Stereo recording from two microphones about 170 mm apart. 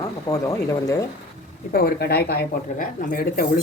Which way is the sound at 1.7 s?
60° left (ahead or behind).